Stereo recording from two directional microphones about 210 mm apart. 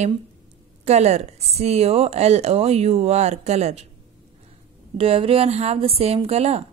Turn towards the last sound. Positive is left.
turn(degrees=-30)  # may be behind; listen again after turning